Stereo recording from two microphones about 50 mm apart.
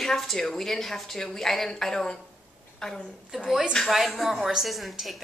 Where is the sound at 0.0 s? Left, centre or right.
Centre.